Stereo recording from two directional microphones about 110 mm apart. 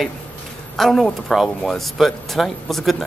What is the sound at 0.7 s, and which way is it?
Speech, 5° left (ahead or behind).